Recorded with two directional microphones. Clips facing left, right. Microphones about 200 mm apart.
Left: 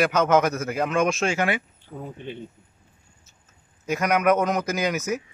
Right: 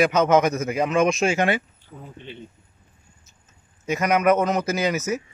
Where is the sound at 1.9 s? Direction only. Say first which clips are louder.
Left 6 dB; 55° left (ahead or behind).